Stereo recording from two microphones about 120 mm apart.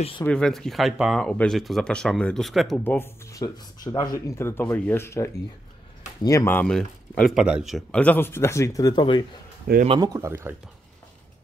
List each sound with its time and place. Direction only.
0.2 s speech: 5° left (ahead or behind)
2.8 s speech: 15° left (ahead or behind)
6.7 s speech: 5° left (ahead or behind)
7.3 s speech: 5° right (ahead or behind)
7.9 s speech: 10° left (ahead or behind); by 9.2 s 40° left (ahead or behind)
9.9 s speech: 30° right (ahead or behind)